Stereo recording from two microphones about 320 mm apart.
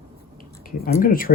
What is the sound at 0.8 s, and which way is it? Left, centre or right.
Speech, left.